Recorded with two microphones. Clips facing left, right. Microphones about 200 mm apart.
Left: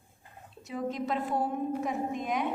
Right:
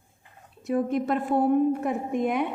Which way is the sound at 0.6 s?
55° right (ahead or behind).